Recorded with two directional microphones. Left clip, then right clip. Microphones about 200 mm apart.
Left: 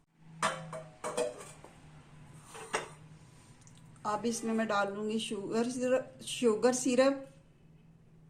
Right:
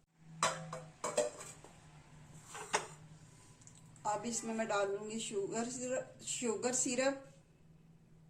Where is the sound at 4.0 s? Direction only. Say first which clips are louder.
Left 4 dB; 45° left (ahead or behind).